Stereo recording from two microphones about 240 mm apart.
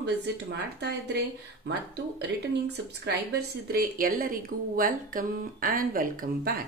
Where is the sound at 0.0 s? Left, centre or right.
Right.